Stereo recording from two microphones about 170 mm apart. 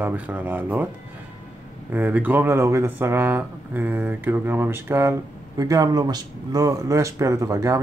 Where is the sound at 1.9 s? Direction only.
10° right (ahead or behind).